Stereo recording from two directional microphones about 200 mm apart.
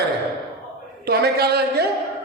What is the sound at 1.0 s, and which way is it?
Speech, 50° right (ahead or behind).